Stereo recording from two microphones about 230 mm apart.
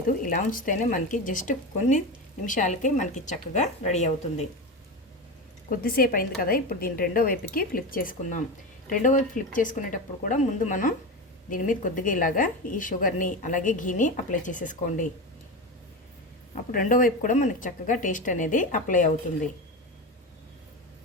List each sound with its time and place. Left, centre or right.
0.3 s a woman's voice: left
5.7 s a woman's voice: left
16.7 s a woman's voice: left